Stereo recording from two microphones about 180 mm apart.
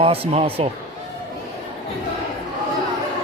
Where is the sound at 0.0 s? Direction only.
30° right (ahead or behind).